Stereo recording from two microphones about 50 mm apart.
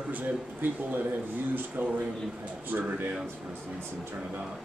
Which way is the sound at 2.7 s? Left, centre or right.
Right.